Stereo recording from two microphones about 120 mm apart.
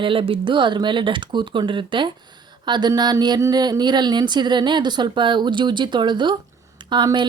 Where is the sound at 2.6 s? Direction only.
40° right (ahead or behind).